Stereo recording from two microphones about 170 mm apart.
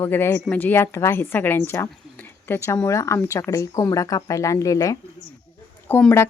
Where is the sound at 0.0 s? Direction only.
15° left (ahead or behind).